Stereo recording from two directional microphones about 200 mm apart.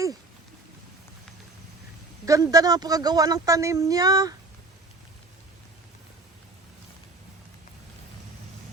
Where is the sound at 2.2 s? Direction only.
15° right (ahead or behind).